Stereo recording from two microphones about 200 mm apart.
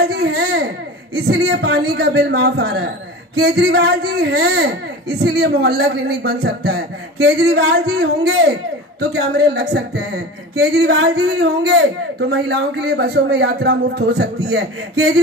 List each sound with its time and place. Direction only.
0.0 s baby cry: 50° right (ahead or behind)
1.1 s a child's voice: 50° right (ahead or behind)